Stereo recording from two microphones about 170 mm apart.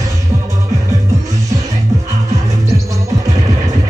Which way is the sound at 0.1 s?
20° right (ahead or behind).